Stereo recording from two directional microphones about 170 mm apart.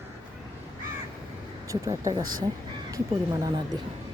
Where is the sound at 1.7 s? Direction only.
20° right (ahead or behind).